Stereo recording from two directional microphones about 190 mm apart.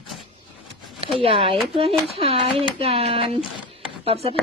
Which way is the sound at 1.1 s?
30° right (ahead or behind).